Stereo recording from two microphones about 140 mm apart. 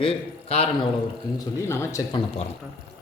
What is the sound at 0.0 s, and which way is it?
Speech, 45° left (ahead or behind).